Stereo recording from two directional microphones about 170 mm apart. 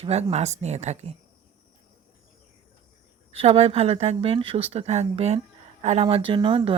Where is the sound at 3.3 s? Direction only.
40° right (ahead or behind).